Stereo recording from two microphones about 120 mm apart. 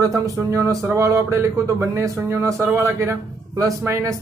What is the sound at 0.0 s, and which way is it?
Speech, 25° right (ahead or behind).